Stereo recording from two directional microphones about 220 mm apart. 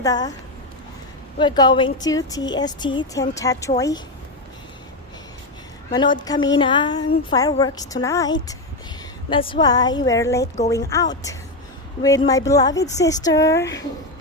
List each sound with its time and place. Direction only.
0.0 s speech: 15° left (ahead or behind)
1.4 s a woman's voice: 20° left (ahead or behind)
5.9 s a woman's voice: 20° left (ahead or behind)